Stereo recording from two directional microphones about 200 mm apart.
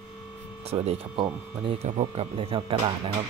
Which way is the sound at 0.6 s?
30° right (ahead or behind).